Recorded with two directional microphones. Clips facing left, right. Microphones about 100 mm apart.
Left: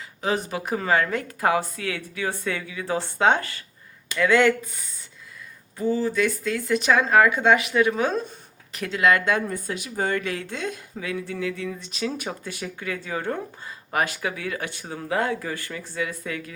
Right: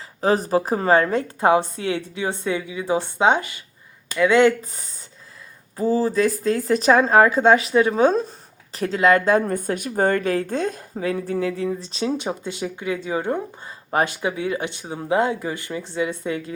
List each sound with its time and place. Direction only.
0.2 s a woman's voice: 40° right (ahead or behind); by 4.5 s 20° right (ahead or behind)
4.6 s a woman's voice: 35° right (ahead or behind)
9.5 s a woman's voice: 50° right (ahead or behind); by 16.6 s 25° right (ahead or behind)